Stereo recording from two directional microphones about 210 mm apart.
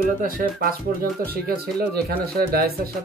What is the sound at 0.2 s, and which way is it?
Speech, 40° right (ahead or behind).